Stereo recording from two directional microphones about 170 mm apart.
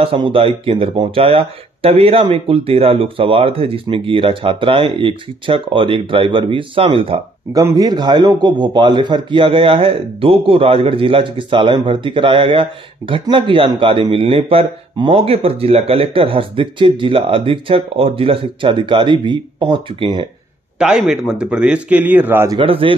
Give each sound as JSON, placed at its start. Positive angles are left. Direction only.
{"t": 0.0, "sound": "a man's voice", "side_deg": -30}
{"t": 7.6, "sound": "a man's voice", "side_deg": -20}
{"t": 20.8, "sound": "speech", "side_deg": -5}
{"t": 22.6, "sound": "a man's voice", "side_deg": -30}